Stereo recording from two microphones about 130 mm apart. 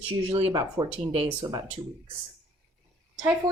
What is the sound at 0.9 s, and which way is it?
Speech, 50° right (ahead or behind).